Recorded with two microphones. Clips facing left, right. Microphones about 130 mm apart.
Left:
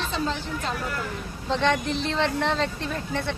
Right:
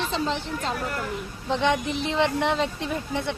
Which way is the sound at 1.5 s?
15° right (ahead or behind).